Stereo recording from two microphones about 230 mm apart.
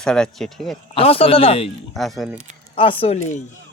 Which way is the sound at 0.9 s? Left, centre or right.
Left.